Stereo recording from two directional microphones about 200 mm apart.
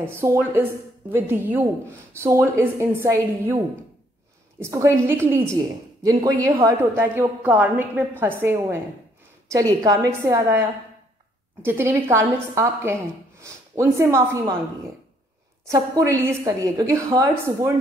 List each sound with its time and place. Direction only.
0.0 s a woman's voice: 15° right (ahead or behind)
11.6 s a woman's voice: 10° right (ahead or behind)
15.6 s a woman's voice: 15° right (ahead or behind)